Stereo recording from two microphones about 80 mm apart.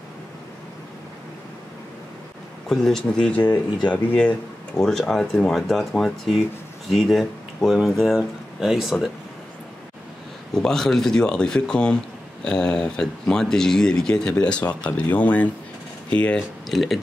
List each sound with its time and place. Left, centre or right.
2.7 s speech: centre
4.7 s speech: centre
10.5 s speech: centre
16.6 s speech: centre